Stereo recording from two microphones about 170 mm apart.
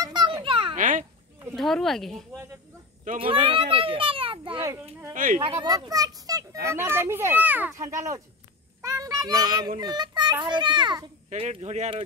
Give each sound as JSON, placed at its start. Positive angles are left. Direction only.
{"t": 0.0, "sound": "a sound", "side_deg": -25}
{"t": 0.7, "sound": "a sound", "side_deg": -50}
{"t": 1.5, "sound": "speech", "side_deg": 0}
{"t": 3.2, "sound": "a child's voice", "side_deg": -30}
{"t": 4.6, "sound": "a child's voice", "side_deg": -10}
{"t": 5.1, "sound": "speech", "side_deg": -50}
{"t": 5.4, "sound": "a child's voice", "side_deg": -30}
{"t": 8.8, "sound": "a sound", "side_deg": -20}
{"t": 9.8, "sound": "a child's voice", "side_deg": -25}
{"t": 11.2, "sound": "speech", "side_deg": -40}